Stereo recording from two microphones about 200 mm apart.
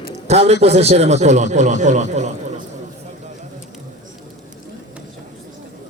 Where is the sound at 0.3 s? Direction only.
30° right (ahead or behind).